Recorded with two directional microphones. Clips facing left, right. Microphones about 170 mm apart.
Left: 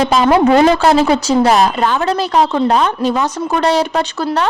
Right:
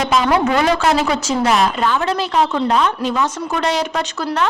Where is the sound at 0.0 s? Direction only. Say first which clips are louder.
Left 5 dB; 30° left (ahead or behind).